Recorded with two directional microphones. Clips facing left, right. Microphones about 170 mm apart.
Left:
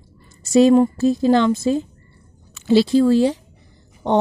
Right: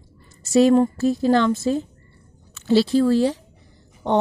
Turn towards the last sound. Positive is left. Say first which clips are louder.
# left 2 dB
turn(degrees=15)  # may be behind; listen again after turning